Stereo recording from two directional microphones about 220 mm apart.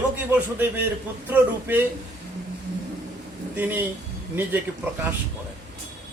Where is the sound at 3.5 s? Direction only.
10° right (ahead or behind).